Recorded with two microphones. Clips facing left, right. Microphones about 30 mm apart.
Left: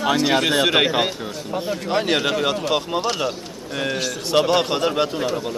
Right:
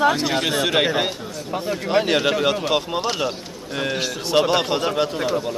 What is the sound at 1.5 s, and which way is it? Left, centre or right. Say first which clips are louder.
Speech: right 2 dB; centre.